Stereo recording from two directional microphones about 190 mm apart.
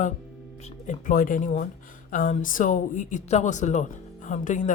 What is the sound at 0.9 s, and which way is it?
Speech, 45° left (ahead or behind).